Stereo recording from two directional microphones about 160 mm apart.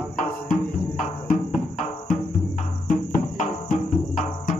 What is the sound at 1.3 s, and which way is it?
Music, 45° left (ahead or behind).